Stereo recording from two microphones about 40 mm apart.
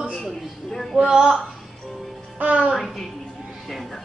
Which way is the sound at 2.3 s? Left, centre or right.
Right.